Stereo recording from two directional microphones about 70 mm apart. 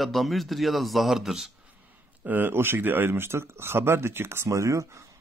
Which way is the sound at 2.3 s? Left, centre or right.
Right.